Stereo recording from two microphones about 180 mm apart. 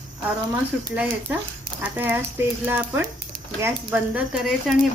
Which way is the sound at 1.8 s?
10° right (ahead or behind).